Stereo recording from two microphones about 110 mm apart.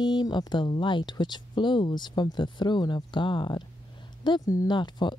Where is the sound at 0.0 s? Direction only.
40° left (ahead or behind).